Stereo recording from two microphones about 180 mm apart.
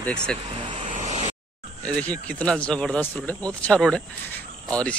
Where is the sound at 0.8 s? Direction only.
40° right (ahead or behind).